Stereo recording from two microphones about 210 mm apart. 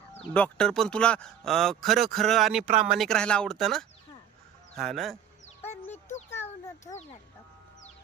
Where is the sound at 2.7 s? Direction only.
35° right (ahead or behind).